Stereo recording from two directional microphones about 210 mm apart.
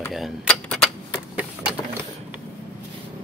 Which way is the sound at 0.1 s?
Centre (ahead or behind).